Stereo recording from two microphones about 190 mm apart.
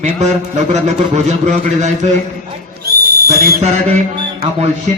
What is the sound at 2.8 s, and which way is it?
Owl, 55° right (ahead or behind).